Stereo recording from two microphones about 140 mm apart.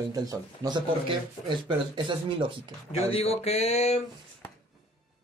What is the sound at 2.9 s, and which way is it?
Speech, 45° left (ahead or behind).